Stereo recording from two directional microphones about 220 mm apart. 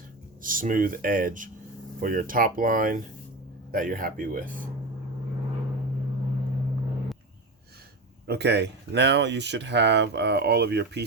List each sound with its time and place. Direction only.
0.4 s speech: 40° right (ahead or behind)
8.3 s speech: 50° right (ahead or behind)